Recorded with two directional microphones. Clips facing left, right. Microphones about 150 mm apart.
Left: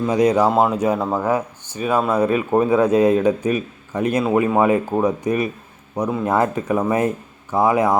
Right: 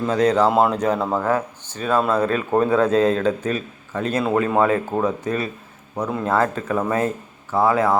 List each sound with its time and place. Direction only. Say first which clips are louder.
0.1 s speech: left 1 dB; 10° left (ahead or behind)